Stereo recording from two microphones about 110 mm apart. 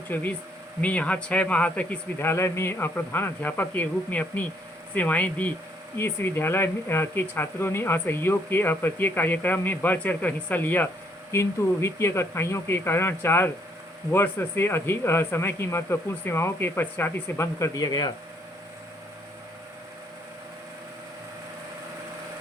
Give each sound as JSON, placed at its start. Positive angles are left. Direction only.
{"t": 0.1, "sound": "speech", "side_deg": 15}